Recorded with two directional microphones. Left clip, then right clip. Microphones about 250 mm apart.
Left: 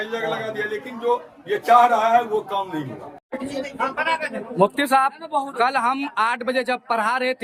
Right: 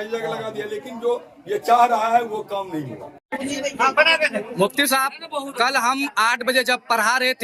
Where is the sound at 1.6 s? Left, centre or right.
Centre.